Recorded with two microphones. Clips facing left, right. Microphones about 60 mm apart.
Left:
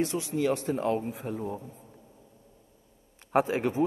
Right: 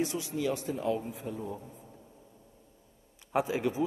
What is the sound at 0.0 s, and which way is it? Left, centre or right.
A man's voice, left.